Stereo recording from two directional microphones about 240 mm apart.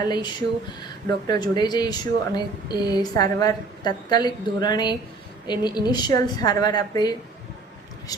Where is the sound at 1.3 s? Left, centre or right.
Centre.